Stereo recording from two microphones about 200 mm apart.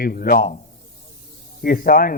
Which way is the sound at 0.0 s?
45° left (ahead or behind).